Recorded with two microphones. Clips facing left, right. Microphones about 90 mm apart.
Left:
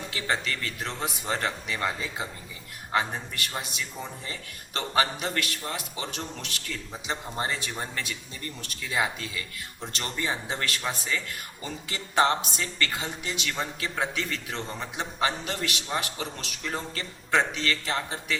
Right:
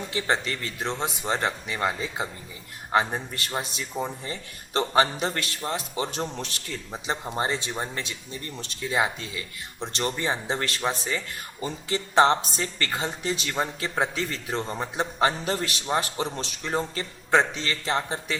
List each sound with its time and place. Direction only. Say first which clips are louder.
0.1 s a man's voice: right 3 dB; 25° right (ahead or behind)